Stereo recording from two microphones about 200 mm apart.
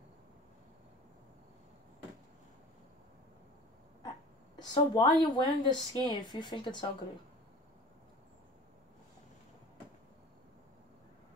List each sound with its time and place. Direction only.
4.6 s a woman's voice: 20° left (ahead or behind)